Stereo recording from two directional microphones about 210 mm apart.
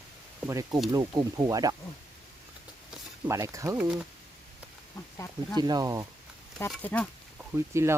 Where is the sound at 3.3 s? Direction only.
15° right (ahead or behind).